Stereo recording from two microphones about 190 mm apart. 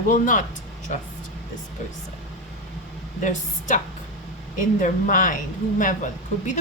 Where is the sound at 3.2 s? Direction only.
40° left (ahead or behind).